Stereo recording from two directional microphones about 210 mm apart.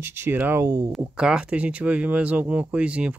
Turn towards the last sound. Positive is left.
turn(degrees=-5)  # may be behind; listen again after turning